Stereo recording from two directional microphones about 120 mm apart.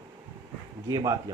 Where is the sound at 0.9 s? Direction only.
30° right (ahead or behind).